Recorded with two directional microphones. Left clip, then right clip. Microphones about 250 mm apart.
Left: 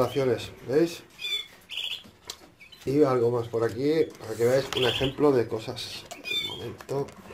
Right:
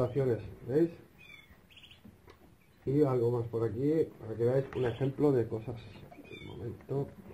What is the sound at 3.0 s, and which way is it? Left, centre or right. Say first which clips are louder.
Speech: left 7 dB; centre.